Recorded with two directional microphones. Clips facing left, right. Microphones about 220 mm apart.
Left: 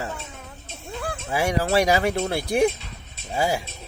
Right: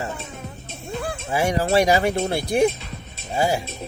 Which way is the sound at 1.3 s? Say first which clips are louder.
Right 2 dB; 5° left (ahead or behind).